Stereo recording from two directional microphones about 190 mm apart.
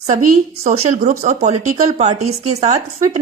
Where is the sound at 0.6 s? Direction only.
40° right (ahead or behind).